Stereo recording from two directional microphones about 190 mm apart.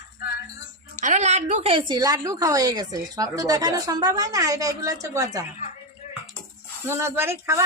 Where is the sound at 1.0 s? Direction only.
40° right (ahead or behind); by 5.4 s 20° right (ahead or behind).